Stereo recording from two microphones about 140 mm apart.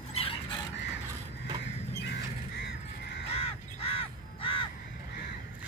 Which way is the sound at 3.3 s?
45° left (ahead or behind).